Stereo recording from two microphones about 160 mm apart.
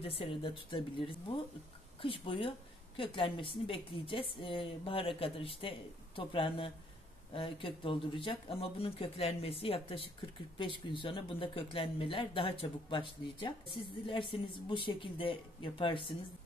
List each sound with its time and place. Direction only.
0.0 s a woman's voice: 35° left (ahead or behind)